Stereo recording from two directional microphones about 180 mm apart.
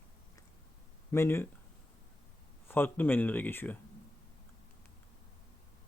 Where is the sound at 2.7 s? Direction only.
10° left (ahead or behind).